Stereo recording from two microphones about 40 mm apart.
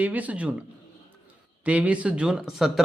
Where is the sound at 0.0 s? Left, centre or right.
Right.